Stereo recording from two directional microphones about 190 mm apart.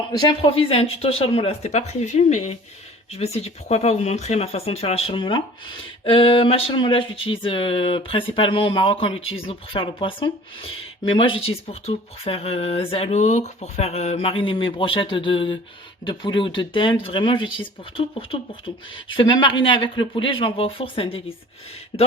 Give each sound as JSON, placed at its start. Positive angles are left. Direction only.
{"t": 0.2, "sound": "speech", "side_deg": 25}